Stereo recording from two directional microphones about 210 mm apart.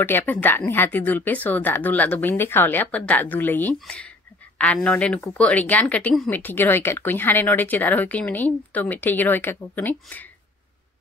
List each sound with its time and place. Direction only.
0.0 s a woman's voice: 10° left (ahead or behind)